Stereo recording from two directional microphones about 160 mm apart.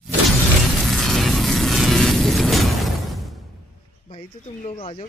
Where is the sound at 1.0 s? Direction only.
Centre (ahead or behind).